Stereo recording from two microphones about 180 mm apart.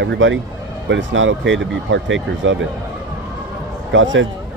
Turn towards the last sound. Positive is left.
turn(degrees=-90)